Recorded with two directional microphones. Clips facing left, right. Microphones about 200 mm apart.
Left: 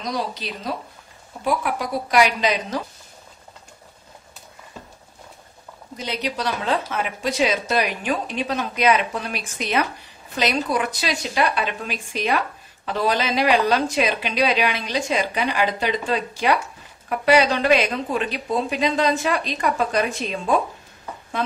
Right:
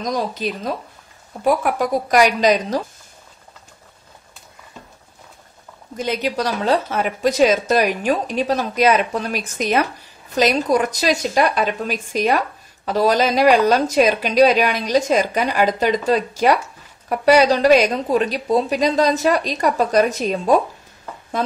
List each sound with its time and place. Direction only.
0.0 s a woman's voice: 45° right (ahead or behind)
5.9 s a woman's voice: 45° right (ahead or behind)